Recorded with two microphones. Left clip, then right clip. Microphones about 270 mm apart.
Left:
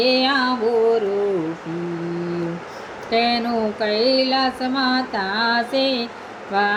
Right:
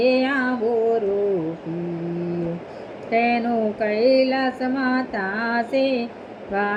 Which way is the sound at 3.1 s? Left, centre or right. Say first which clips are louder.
Left 1 dB; left.